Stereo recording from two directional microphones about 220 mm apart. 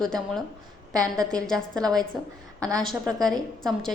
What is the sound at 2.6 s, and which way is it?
Speech, 15° right (ahead or behind).